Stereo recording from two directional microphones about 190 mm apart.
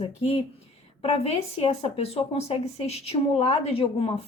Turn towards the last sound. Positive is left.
turn(degrees=30)  # may be behind; listen again after turning